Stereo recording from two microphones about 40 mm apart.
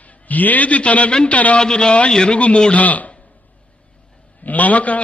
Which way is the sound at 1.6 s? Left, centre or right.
Left.